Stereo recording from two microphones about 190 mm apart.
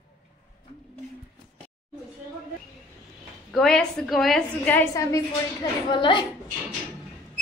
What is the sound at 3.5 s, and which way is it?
A woman's voice, centre (ahead or behind).